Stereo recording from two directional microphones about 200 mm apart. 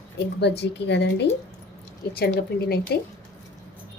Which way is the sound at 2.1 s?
50° left (ahead or behind).